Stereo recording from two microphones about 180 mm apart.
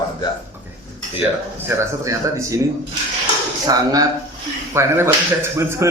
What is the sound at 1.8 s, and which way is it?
Speech, 15° right (ahead or behind).